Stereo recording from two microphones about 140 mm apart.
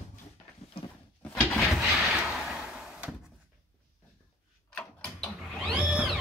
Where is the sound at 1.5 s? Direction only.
Centre (ahead or behind).